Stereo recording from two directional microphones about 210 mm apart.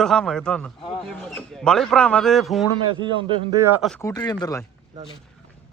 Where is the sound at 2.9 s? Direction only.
25° right (ahead or behind).